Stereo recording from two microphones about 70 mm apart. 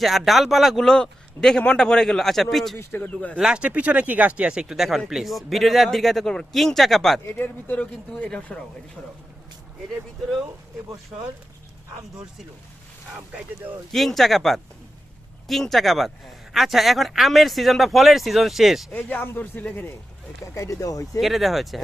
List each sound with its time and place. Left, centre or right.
0.0 s speech: centre
2.7 s speech: left
3.1 s a man's voice: centre
3.3 s speech: centre
7.3 s a man's voice: left
8.2 s speech: centre
13.9 s speech: centre
18.9 s a man's voice: left
20.4 s speech: left
21.2 s speech: centre